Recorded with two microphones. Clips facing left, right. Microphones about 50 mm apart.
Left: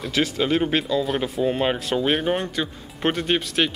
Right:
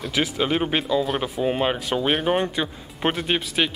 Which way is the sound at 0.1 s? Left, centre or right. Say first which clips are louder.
Left 1 dB; centre.